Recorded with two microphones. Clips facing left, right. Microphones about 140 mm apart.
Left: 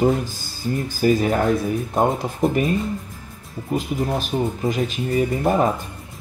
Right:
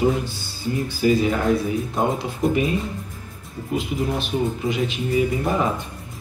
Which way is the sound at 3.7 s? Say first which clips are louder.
Left 1 dB; 40° left (ahead or behind).